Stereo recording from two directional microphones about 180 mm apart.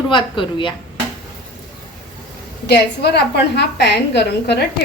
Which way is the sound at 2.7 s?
65° left (ahead or behind).